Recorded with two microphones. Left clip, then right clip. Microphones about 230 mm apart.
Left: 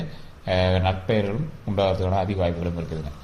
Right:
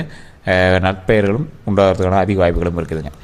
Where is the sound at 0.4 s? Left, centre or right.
Right.